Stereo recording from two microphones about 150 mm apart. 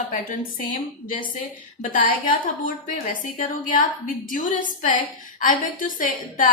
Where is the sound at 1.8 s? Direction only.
65° left (ahead or behind).